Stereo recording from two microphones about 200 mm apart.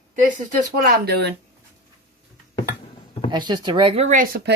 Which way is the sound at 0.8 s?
50° right (ahead or behind).